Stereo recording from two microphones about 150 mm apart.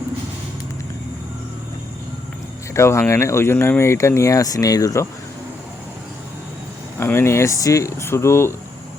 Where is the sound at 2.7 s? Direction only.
20° left (ahead or behind).